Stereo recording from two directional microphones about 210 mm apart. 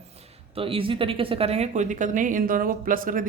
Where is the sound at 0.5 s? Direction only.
25° right (ahead or behind).